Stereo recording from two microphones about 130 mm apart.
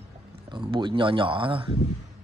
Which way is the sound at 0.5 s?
40° right (ahead or behind).